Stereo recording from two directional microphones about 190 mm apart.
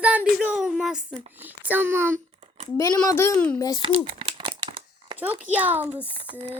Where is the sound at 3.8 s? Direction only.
25° right (ahead or behind).